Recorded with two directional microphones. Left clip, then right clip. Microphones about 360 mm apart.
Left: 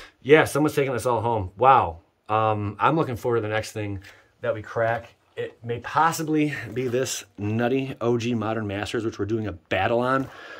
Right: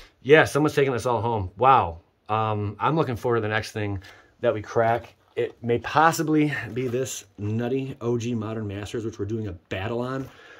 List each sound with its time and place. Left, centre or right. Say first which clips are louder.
0.2 s speech: even; centre
4.4 s speech: right 3 dB; right; by 10.2 s centre